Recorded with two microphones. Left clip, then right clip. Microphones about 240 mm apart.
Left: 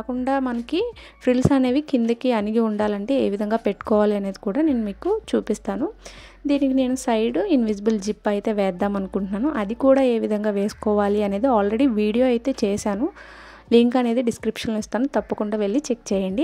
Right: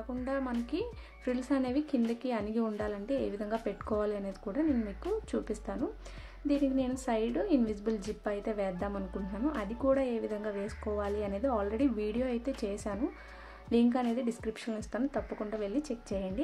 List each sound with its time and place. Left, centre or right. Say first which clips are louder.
0.2 s a woman's voice: left 12 dB; left